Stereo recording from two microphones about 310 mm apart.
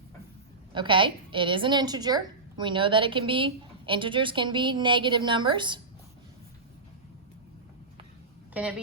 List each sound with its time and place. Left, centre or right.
0.7 s a woman's voice: centre
8.6 s speech: centre